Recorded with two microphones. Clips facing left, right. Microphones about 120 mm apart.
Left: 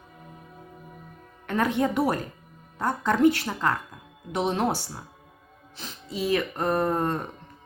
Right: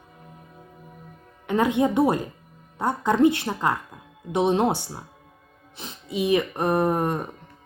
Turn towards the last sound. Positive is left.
turn(degrees=-15)  # may be behind; listen again after turning